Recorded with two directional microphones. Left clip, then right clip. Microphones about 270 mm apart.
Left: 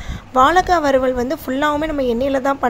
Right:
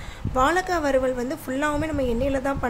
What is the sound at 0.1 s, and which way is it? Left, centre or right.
Speech, centre.